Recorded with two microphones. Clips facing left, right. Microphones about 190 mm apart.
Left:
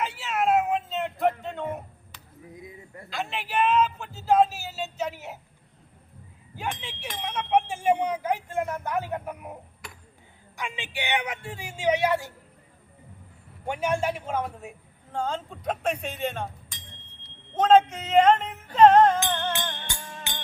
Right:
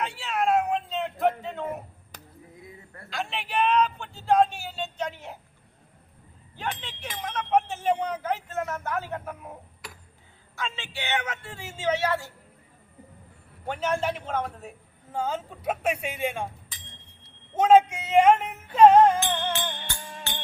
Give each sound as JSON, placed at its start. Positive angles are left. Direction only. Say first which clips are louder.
{"t": 0.0, "sound": "a sound", "louder": "left 1 dB", "side_deg": 0}
{"t": 2.1, "sound": "basketball bounce", "louder": "right 7 dB", "side_deg": -45}
{"t": 3.1, "sound": "speech", "louder": "even", "side_deg": 0}
{"t": 6.6, "sound": "a man's voice", "louder": "even", "side_deg": 10}
{"t": 7.2, "sound": "a sound", "louder": "even", "side_deg": 10}
{"t": 9.8, "sound": "a sound", "louder": "right 2 dB", "side_deg": 0}
{"t": 10.5, "sound": "a man's voice", "louder": "even", "side_deg": 15}
{"t": 13.7, "sound": "a man's voice", "louder": "left 1 dB", "side_deg": 10}
{"t": 15.1, "sound": "speech", "louder": "even", "side_deg": -5}
{"t": 17.5, "sound": "music", "louder": "right 1 dB", "side_deg": -10}
{"t": 20.3, "sound": "music", "louder": "right 2 dB", "side_deg": 15}